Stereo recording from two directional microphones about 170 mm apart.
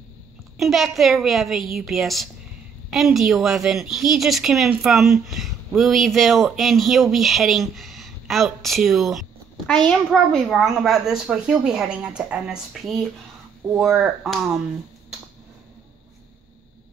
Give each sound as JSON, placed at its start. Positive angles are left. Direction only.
{"t": 0.6, "sound": "a woman's voice", "side_deg": 0}